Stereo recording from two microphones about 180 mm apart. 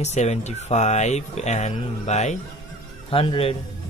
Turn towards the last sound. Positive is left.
turn(degrees=30)  # may be behind; listen again after turning